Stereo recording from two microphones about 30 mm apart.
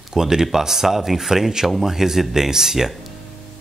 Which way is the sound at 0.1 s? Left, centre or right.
Centre.